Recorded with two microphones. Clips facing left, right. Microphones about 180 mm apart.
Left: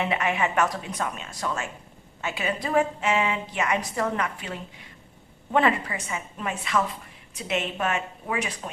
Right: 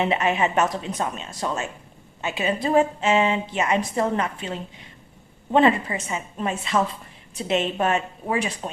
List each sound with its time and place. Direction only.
0.0 s a woman's voice: 25° right (ahead or behind)